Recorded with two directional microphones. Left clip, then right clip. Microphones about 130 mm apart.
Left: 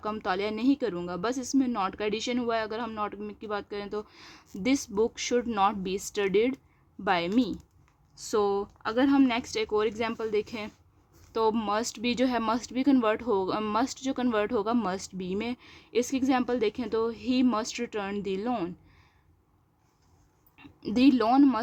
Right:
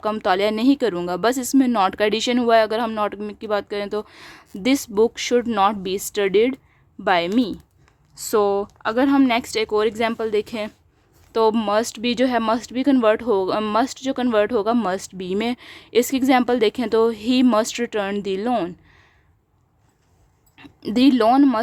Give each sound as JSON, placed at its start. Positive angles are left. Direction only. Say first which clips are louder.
{"t": 0.0, "sound": "speech", "louder": "right 11 dB", "side_deg": -40}
{"t": 20.6, "sound": "speech", "louder": "right 7 dB", "side_deg": -35}